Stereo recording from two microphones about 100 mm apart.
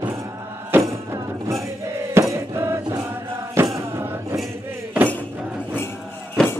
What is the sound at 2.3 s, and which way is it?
Chant, 25° right (ahead or behind).